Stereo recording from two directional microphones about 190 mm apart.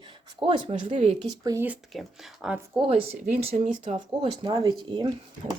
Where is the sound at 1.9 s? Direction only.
Centre (ahead or behind).